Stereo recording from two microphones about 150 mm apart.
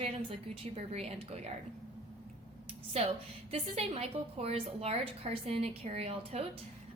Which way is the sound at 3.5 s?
45° right (ahead or behind).